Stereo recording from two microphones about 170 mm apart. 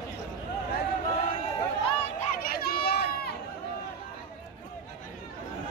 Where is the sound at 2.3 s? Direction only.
60° left (ahead or behind).